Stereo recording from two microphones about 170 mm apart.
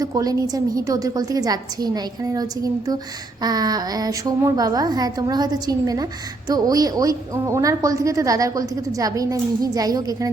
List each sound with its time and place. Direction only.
0.0 s a woman's voice: 20° right (ahead or behind)